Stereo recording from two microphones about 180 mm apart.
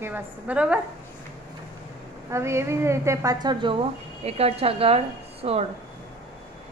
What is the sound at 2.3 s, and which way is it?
Speech, 15° right (ahead or behind).